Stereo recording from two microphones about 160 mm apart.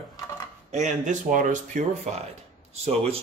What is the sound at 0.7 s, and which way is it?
Speech, 45° right (ahead or behind).